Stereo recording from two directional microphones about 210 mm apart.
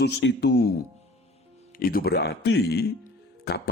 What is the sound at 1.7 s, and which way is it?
Speech, 45° left (ahead or behind).